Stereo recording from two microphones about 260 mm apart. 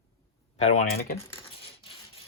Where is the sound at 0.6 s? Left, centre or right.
Left.